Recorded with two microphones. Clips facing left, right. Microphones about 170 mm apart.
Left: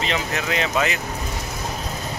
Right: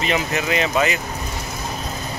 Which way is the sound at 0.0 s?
10° right (ahead or behind).